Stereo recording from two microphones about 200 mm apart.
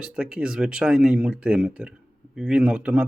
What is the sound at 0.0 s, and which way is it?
Speech, 5° right (ahead or behind).